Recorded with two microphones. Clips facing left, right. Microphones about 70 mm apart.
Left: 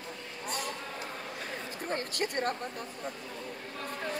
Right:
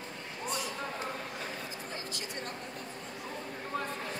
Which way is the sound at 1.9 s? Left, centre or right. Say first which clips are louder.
Left 7 dB; left.